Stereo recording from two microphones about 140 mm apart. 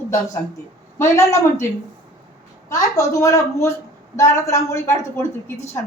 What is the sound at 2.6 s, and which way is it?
A woman's voice, 25° left (ahead or behind).